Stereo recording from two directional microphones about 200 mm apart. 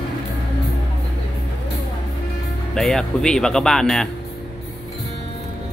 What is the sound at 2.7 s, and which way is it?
Speech, 5° left (ahead or behind).